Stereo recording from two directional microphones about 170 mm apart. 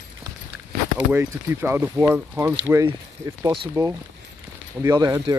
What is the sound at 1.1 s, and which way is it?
Speech, 15° right (ahead or behind).